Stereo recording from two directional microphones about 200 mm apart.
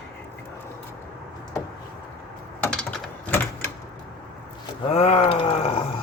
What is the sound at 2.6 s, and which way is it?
Mechanisms, 5° left (ahead or behind).